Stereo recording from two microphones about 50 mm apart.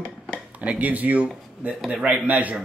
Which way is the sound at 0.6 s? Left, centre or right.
Right.